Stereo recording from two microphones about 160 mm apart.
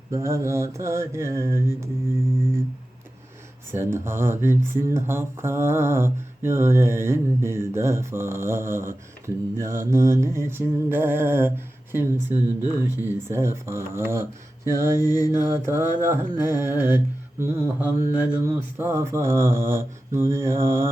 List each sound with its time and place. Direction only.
0.1 s speech: 20° right (ahead or behind)
3.7 s speech: 15° right (ahead or behind)